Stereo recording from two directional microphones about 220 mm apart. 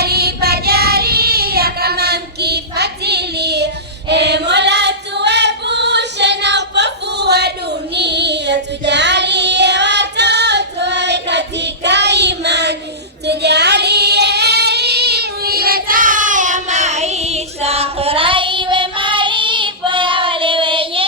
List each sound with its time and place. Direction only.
0.0 s child singing: 45° right (ahead or behind)
4.1 s singing: 50° right (ahead or behind)
7.9 s child singing: 50° right (ahead or behind); by 21.0 s 25° right (ahead or behind)